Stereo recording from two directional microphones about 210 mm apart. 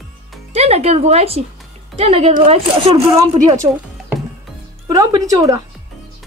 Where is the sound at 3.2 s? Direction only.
15° right (ahead or behind).